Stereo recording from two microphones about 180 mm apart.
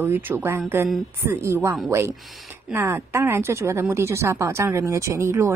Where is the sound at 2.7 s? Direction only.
15° right (ahead or behind).